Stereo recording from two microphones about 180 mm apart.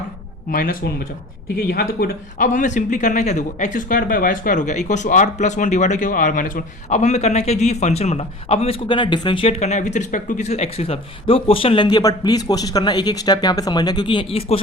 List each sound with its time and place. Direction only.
0.5 s speech: 55° left (ahead or behind); by 14.6 s 30° left (ahead or behind)